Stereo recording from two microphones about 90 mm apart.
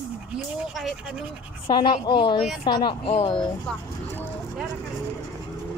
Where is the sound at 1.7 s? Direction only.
60° left (ahead or behind).